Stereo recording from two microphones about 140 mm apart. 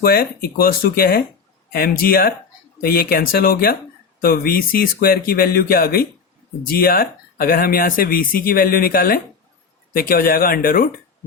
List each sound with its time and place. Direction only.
0.0 s speech: 90° left